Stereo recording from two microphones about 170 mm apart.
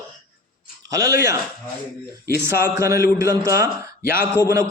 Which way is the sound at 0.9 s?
20° right (ahead or behind).